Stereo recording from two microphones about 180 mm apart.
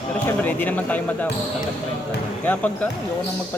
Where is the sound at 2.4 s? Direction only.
10° left (ahead or behind).